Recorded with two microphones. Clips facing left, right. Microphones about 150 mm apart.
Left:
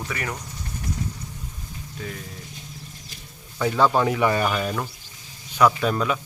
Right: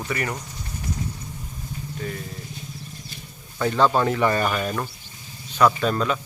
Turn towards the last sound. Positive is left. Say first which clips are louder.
# even
turn(degrees=10)  # may be behind; listen again after turning